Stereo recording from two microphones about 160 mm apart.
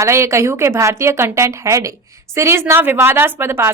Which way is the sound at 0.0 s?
15° right (ahead or behind).